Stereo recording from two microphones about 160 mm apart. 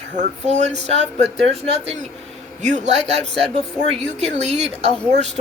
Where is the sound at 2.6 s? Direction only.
50° right (ahead or behind).